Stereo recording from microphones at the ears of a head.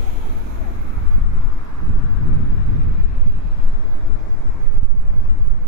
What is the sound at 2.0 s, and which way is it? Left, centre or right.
Vehicle, left.